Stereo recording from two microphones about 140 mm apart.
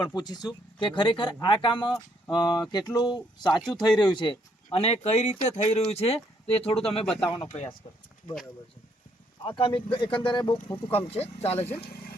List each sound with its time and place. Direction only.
0.0 s speech: 30° left (ahead or behind)
7.0 s speech: 5° left (ahead or behind)
9.4 s speech: 40° left (ahead or behind)
11.9 s speech: 90° left